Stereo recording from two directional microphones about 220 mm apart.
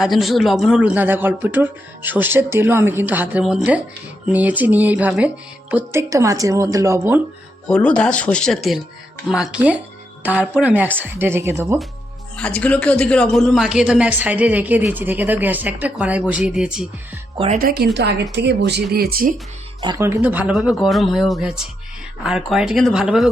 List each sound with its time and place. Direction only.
0.0 s a man's voice: centre (ahead or behind)
7.7 s a man's voice: 5° left (ahead or behind); by 11.8 s 10° right (ahead or behind)
12.4 s a man's voice: 5° left (ahead or behind)
17.3 s speech: 25° right (ahead or behind)
17.6 s speech: 40° right (ahead or behind)
19.8 s a man's voice: 15° right (ahead or behind)